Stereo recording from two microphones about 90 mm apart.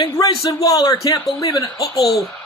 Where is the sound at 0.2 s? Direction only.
45° left (ahead or behind).